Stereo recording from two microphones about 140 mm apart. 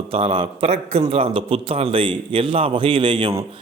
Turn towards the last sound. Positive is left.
turn(degrees=-40)  # may be behind; listen again after turning